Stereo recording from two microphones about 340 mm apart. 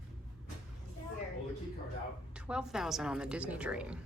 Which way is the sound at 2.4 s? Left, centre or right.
Centre.